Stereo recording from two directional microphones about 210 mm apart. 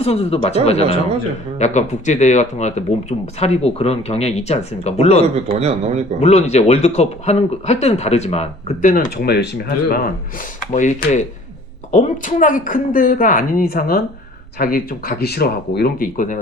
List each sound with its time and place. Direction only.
0.0 s speech: 30° left (ahead or behind)
5.3 s speech: 30° right (ahead or behind)
6.1 s speech: 30° left (ahead or behind); by 10.0 s 50° left (ahead or behind)
10.7 s speech: 35° left (ahead or behind)